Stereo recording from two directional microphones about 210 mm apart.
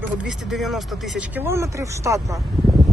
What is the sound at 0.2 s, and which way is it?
Speech, centre (ahead or behind).